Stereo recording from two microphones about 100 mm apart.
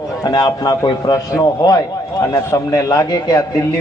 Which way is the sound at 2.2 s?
35° left (ahead or behind).